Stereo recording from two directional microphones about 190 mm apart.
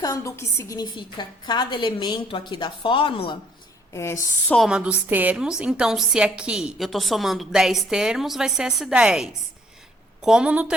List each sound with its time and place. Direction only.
0.0 s a woman's voice: 15° left (ahead or behind)
3.9 s a woman's voice: 15° left (ahead or behind)
4.5 s a woman's voice: centre (ahead or behind)